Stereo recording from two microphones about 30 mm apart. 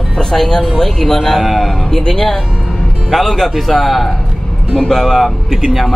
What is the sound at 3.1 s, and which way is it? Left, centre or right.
Speech, centre.